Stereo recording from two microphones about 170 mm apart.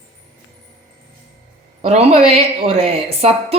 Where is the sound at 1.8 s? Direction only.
40° right (ahead or behind).